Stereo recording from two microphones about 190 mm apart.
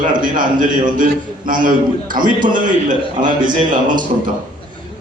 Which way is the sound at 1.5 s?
45° right (ahead or behind).